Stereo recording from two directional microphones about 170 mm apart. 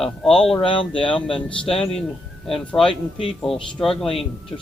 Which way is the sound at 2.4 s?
Centre (ahead or behind).